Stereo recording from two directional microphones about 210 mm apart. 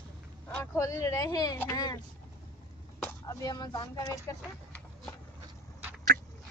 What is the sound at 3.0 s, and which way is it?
Speech, 15° left (ahead or behind).